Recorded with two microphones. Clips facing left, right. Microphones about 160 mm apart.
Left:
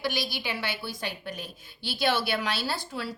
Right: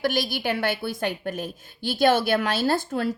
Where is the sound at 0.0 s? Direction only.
50° right (ahead or behind).